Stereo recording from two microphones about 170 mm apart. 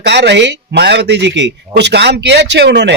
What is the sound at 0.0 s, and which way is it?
Speech, 85° right.